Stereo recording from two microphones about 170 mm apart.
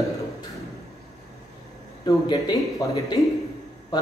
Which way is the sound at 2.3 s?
25° left (ahead or behind).